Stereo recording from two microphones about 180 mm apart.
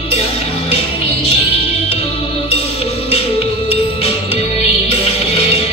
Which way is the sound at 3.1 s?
30° left (ahead or behind).